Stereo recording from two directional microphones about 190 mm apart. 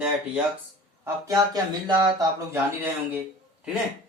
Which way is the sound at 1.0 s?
15° right (ahead or behind).